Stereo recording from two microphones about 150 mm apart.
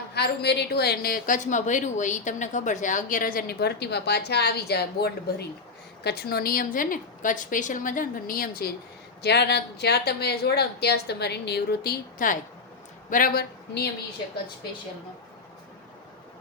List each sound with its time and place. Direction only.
0.1 s a woman's voice: 90° left
9.2 s a woman's voice: 90° left
13.1 s speech: 65° left (ahead or behind); by 13.8 s 85° left